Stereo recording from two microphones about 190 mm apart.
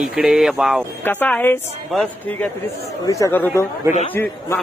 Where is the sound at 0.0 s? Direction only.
5° right (ahead or behind).